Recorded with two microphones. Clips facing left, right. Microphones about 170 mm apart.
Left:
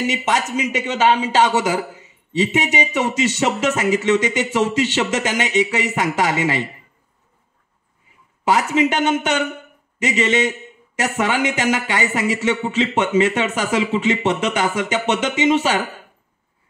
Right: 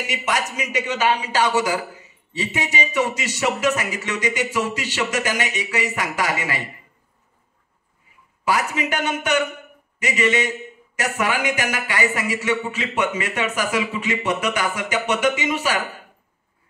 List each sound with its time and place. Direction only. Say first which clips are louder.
0.0 s speech: left 4 dB; 25° left (ahead or behind)
8.5 s speech: left 5 dB; 25° left (ahead or behind)